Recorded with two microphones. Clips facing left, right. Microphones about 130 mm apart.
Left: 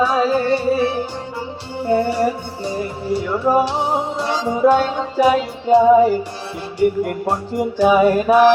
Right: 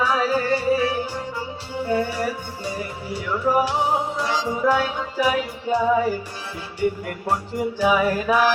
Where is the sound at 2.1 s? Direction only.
25° left (ahead or behind).